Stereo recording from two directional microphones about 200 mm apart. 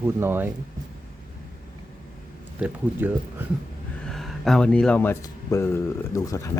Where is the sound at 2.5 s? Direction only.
10° right (ahead or behind); by 6.5 s 15° left (ahead or behind).